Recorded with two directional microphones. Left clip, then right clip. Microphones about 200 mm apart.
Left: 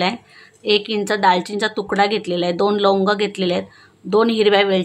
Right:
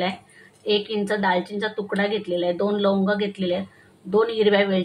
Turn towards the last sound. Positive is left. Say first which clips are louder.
# left 4 dB
turn(degrees=40)  # may be behind; listen again after turning